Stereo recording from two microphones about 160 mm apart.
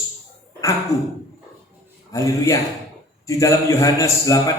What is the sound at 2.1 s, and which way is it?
A man's voice, 20° left (ahead or behind).